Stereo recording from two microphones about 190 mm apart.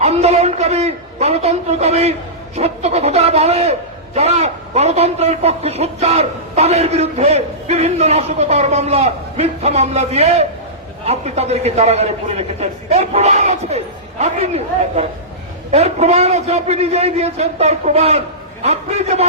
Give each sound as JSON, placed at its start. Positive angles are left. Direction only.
{"t": 0.0, "sound": "a man's voice", "side_deg": -35}